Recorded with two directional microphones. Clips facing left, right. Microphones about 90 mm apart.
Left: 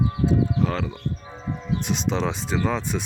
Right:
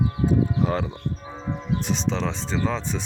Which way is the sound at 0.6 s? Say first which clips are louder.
Right 1 dB; 15° right (ahead or behind).